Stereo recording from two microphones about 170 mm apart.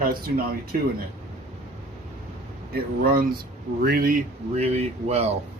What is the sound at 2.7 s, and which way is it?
Speech, 60° right (ahead or behind).